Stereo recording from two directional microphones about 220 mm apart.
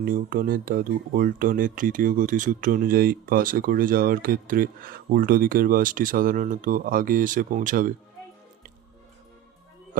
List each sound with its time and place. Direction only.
0.0 s speech: 40° right (ahead or behind)